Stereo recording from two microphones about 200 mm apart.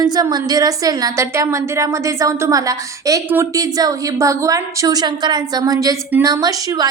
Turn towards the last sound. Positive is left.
turn(degrees=-20)  # may be behind; listen again after turning